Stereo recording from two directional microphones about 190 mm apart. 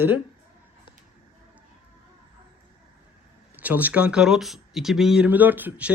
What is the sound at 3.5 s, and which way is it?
Speech, 10° right (ahead or behind).